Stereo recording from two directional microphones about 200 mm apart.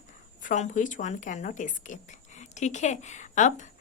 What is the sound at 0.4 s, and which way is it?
A woman's voice, 40° left (ahead or behind).